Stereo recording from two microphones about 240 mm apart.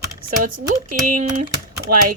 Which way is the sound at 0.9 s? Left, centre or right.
Right.